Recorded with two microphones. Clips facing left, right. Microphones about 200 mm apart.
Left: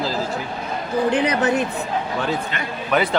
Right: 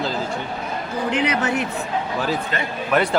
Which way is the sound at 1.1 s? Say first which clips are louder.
Even; 35° left (ahead or behind).